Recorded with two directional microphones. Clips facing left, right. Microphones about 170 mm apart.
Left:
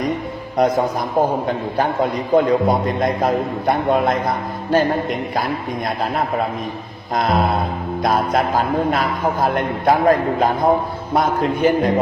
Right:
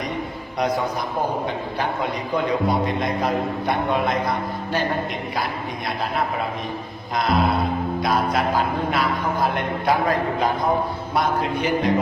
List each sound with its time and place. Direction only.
0.5 s a man's voice: 50° left (ahead or behind)
7.2 s a man's voice: 50° left (ahead or behind)